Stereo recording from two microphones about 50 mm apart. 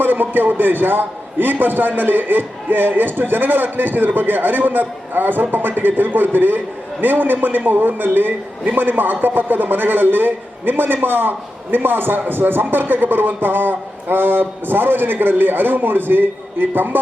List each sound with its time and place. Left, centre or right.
0.0 s a man's voice: right